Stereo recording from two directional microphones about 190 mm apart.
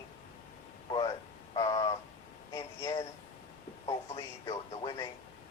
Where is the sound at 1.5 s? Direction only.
25° left (ahead or behind).